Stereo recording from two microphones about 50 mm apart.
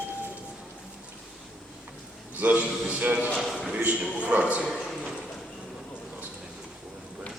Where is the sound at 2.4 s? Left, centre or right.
Right.